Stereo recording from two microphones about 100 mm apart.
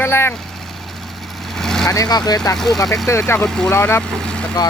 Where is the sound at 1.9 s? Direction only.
40° left (ahead or behind).